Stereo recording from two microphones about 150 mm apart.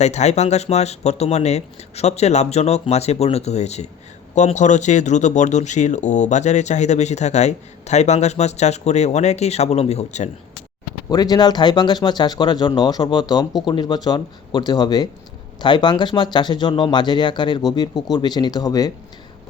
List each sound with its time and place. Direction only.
0.0 s speech: 50° left (ahead or behind)
11.1 s speech: 25° left (ahead or behind)